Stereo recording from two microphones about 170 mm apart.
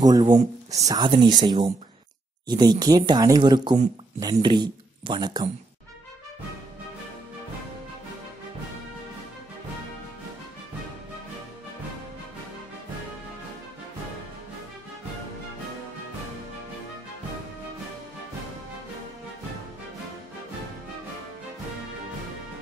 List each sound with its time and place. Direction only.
0.0 s speech: 25° right (ahead or behind)